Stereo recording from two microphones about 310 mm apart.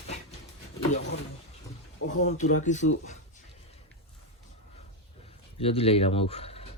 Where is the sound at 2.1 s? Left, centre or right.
Left.